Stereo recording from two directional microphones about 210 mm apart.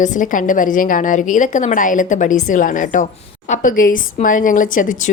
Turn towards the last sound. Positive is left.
turn(degrees=40)  # may be behind; listen again after turning